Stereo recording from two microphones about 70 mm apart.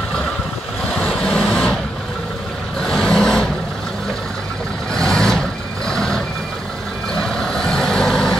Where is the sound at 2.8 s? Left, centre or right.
Centre.